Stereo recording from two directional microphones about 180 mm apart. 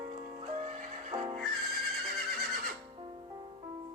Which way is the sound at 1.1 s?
25° right (ahead or behind).